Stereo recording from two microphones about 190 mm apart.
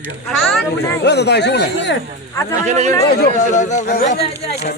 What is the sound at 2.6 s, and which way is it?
Speech, 35° right (ahead or behind).